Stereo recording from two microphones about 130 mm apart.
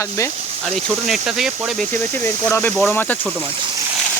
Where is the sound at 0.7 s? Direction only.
Centre (ahead or behind).